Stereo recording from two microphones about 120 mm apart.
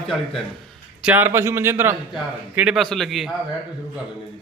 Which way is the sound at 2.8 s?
Centre (ahead or behind).